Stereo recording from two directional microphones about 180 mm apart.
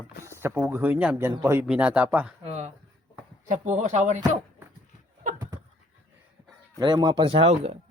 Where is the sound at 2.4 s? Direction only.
40° right (ahead or behind).